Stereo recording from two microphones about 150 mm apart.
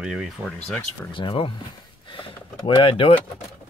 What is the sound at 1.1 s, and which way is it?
Speech, 35° left (ahead or behind).